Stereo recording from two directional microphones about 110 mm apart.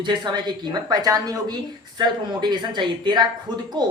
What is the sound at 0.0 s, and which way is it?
A woman's voice, 40° right (ahead or behind).